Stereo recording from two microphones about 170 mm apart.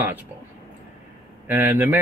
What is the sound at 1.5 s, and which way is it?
Speech, 10° right (ahead or behind).